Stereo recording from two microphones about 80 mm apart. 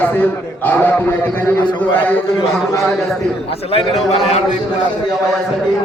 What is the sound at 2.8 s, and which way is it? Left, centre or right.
Speech, centre.